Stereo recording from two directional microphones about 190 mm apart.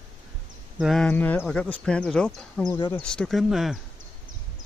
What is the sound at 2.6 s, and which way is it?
Speech, 25° left (ahead or behind).